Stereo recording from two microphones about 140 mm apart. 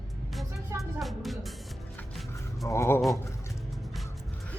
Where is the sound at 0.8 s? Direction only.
Centre (ahead or behind).